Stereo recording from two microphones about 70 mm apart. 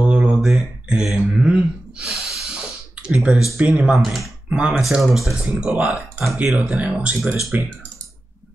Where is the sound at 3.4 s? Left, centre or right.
Centre.